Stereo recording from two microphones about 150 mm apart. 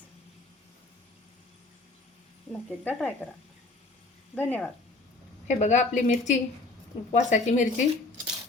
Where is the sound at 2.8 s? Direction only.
10° left (ahead or behind).